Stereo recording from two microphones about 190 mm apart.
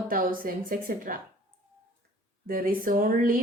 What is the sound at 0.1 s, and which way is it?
Speech, 45° right (ahead or behind).